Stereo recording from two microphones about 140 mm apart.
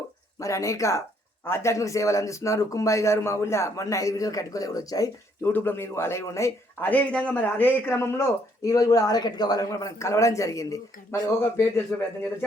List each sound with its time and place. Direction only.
0.3 s a man's voice: 20° left (ahead or behind)
5.5 s a man's voice: 15° left (ahead or behind)